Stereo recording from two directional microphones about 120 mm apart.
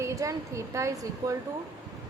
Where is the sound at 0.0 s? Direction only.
25° right (ahead or behind).